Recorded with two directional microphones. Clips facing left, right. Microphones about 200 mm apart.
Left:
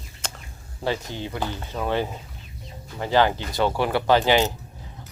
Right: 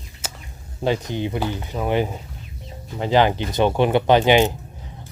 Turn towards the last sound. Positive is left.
turn(degrees=-20)  # may be behind; listen again after turning